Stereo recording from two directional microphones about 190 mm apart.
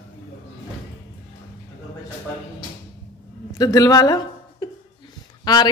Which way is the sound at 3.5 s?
20° left (ahead or behind).